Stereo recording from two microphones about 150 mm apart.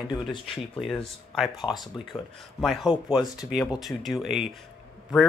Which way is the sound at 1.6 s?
30° left (ahead or behind).